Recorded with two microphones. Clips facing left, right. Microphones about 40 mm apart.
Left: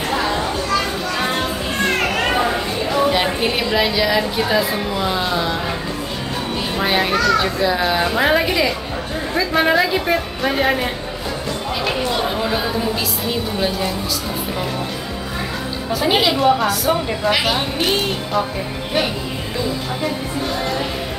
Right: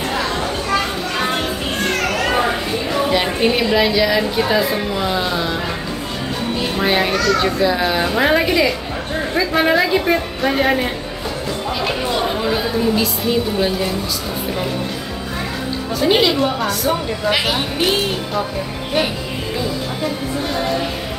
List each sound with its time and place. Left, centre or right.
2.9 s a woman's voice: centre
6.8 s a woman's voice: centre
15.9 s a woman's voice: centre